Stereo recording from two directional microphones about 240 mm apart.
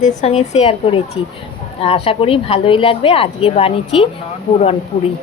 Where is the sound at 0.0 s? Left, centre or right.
Left.